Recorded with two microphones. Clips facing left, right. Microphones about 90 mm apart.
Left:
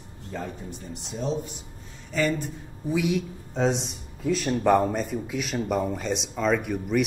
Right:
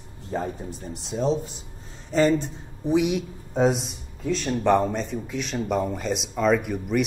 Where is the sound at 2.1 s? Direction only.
30° right (ahead or behind); by 3.9 s 5° right (ahead or behind).